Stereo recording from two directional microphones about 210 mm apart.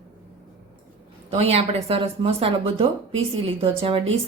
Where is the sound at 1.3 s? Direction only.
30° right (ahead or behind).